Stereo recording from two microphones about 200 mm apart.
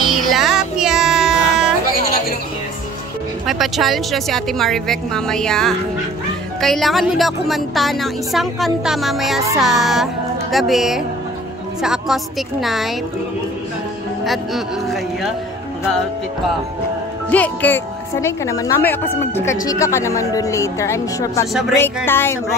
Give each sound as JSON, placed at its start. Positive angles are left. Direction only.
{"t": 0.0, "sound": "music", "side_deg": 0}
{"t": 3.4, "sound": "a woman's voice", "side_deg": 0}
{"t": 14.2, "sound": "a woman's voice", "side_deg": 0}
{"t": 17.3, "sound": "speech", "side_deg": 10}